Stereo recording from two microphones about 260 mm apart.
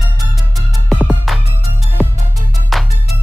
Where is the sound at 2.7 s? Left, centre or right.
Centre.